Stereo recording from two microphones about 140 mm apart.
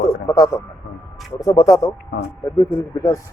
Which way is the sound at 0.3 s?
25° left (ahead or behind).